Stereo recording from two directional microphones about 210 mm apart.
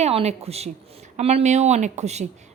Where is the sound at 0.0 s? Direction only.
30° right (ahead or behind).